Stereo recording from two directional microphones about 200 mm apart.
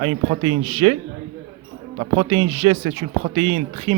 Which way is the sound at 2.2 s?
25° right (ahead or behind).